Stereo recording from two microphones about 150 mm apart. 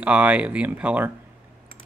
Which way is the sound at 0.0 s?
10° right (ahead or behind).